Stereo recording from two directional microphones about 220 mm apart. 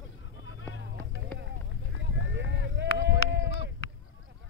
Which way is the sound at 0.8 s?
55° right (ahead or behind).